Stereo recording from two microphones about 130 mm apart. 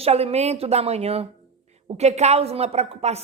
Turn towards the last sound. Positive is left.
turn(degrees=-55)  # may be behind; listen again after turning